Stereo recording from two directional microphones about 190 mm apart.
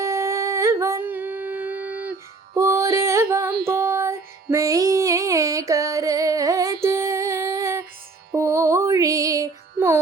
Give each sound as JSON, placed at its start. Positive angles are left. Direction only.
{"t": 0.0, "sound": "humming", "side_deg": -15}
{"t": 2.6, "sound": "music", "side_deg": -15}
{"t": 3.7, "sound": "female singing", "side_deg": -15}
{"t": 6.8, "sound": "music", "side_deg": -15}